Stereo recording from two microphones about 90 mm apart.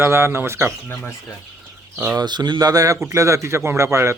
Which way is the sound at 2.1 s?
55° right (ahead or behind).